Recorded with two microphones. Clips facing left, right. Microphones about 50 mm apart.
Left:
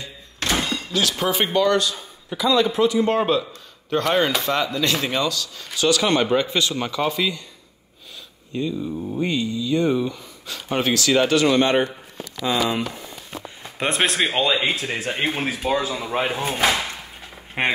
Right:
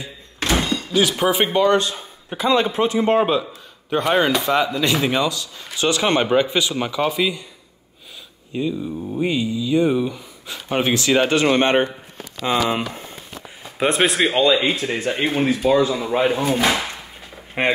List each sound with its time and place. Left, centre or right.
0.0 s thunk: centre
0.9 s a man's voice: centre
3.2 s speech: centre
5.8 s a man's voice: right
6.3 s speech: centre
8.5 s speech: centre; by 13.2 s right
13.7 s speech: centre
17.6 s speech: centre